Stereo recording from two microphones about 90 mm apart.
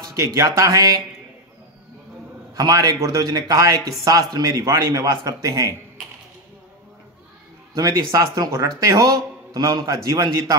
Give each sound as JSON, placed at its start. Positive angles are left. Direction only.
{"t": 0.0, "sound": "a man's voice", "side_deg": -40}
{"t": 2.5, "sound": "a man's voice", "side_deg": -45}
{"t": 7.7, "sound": "a man's voice", "side_deg": -40}